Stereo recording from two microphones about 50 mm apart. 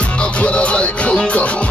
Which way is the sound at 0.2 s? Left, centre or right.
Left.